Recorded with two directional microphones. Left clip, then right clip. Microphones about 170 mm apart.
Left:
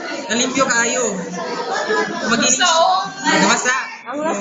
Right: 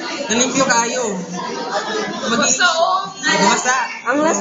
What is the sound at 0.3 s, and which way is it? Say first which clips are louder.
Speech: right 1 dB; 30° right (ahead or behind).